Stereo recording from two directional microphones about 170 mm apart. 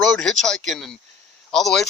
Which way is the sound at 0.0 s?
5° left (ahead or behind).